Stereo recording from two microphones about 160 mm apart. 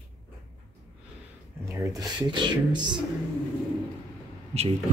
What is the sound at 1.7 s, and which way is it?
Speech, 20° right (ahead or behind).